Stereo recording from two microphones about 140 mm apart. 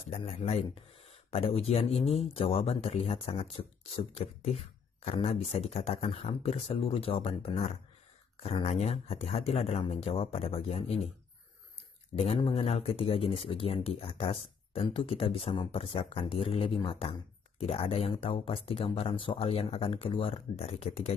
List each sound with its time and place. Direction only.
0.2 s speech: 50° left (ahead or behind)
12.2 s speech: 50° left (ahead or behind)